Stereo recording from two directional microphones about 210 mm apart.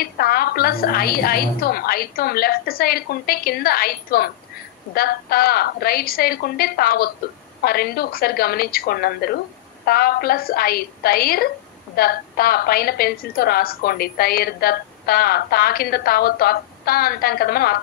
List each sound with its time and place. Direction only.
0.0 s a woman's voice: 45° left (ahead or behind)